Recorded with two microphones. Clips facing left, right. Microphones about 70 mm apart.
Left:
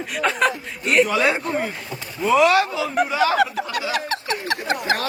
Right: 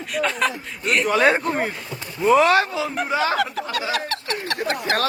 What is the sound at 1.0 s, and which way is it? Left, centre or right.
Speech, right.